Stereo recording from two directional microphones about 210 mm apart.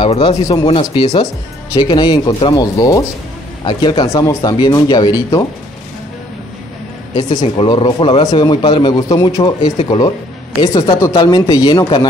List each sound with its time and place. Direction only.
0.0 s a man's voice: 25° left (ahead or behind)
7.2 s a man's voice: 20° left (ahead or behind)